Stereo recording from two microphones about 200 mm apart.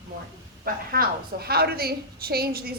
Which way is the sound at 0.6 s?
50° right (ahead or behind).